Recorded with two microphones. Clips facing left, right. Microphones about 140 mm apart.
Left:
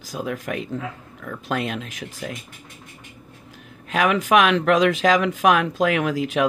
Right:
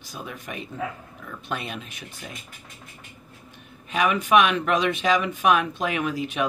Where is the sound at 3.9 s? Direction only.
90° left.